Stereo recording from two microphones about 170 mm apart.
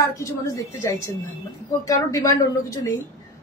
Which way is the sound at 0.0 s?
15° left (ahead or behind).